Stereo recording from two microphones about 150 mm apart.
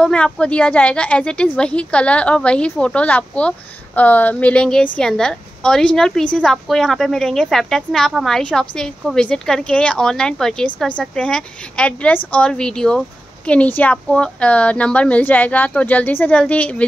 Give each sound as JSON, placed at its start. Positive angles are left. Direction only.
{"t": 0.0, "sound": "a woman's voice", "side_deg": 5}